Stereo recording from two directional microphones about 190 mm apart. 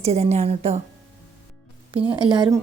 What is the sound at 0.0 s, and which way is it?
Speech, 35° right (ahead or behind).